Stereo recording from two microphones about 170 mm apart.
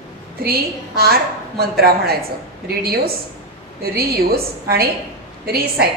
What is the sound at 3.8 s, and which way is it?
A woman's voice, 65° right (ahead or behind).